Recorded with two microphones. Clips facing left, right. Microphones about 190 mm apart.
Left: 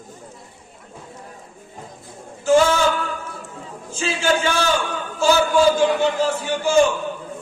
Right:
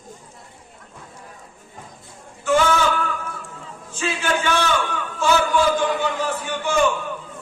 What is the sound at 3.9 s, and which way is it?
Speech, 30° left (ahead or behind).